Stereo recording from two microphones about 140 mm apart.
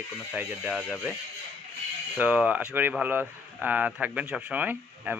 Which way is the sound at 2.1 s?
10° right (ahead or behind).